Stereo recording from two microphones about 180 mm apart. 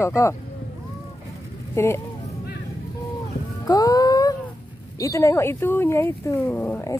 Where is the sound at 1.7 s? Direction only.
15° left (ahead or behind).